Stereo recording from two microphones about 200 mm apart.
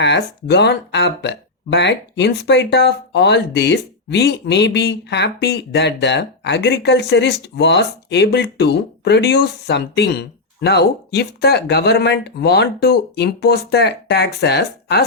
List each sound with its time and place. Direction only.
0.0 s speech: 60° left (ahead or behind)